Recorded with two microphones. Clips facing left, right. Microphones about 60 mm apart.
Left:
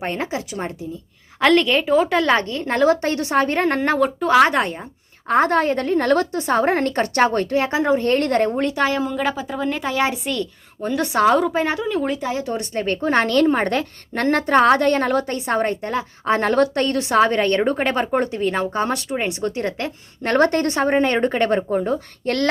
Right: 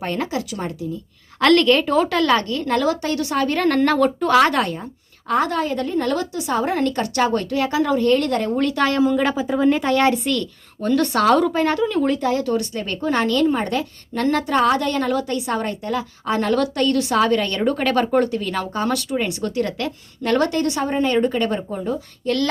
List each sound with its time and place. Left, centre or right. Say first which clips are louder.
0.0 s a woman's voice: right 1 dB; left
1.4 s a woman's voice: right 1 dB; centre
2.0 s a woman's voice: even; left
3.8 s a woman's voice: right 2 dB; centre
5.3 s a woman's voice: left 3 dB; left
8.5 s a woman's voice: right 1 dB; left
9.0 s speech: right 4 dB; centre
9.9 s a woman's voice: right 4 dB; centre
12.7 s a woman's voice: left 3 dB; left